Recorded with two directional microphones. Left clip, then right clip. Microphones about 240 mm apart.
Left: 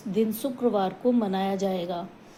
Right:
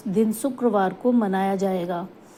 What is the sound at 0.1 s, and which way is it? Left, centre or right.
A woman's voice, centre.